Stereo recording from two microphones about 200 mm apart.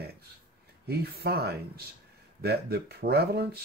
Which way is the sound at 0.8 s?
50° right (ahead or behind).